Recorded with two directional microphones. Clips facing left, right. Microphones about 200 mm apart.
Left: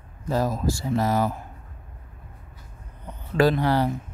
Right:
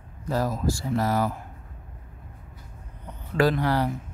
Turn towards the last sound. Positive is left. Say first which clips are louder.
# left 2 dB
turn(degrees=25)  # may be behind; listen again after turning